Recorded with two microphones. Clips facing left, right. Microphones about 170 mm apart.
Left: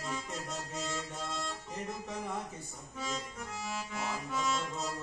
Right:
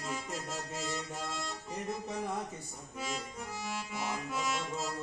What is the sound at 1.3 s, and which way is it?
Music, 5° right (ahead or behind).